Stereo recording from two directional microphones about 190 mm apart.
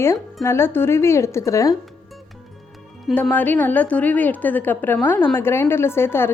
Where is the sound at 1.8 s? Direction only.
Centre (ahead or behind).